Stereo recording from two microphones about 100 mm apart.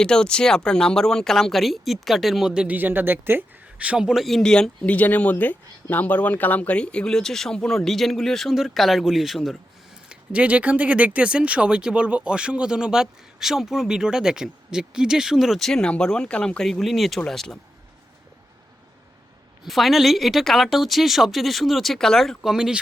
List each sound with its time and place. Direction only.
0.0 s speech: 10° left (ahead or behind)
19.6 s speech: centre (ahead or behind)